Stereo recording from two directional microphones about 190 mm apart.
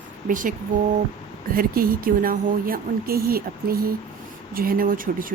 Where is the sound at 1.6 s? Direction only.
50° right (ahead or behind).